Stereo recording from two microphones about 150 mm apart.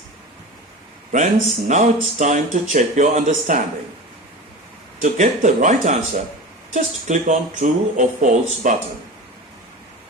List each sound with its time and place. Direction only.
1.1 s speech: 50° right (ahead or behind)
4.9 s speech: 55° right (ahead or behind)